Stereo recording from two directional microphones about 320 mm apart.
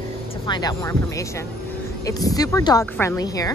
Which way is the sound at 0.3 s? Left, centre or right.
Centre.